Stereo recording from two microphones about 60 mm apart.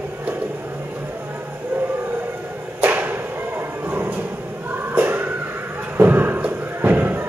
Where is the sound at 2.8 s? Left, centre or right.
Right.